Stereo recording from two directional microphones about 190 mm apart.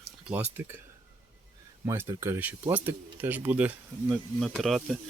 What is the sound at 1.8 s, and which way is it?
Speech, 10° right (ahead or behind).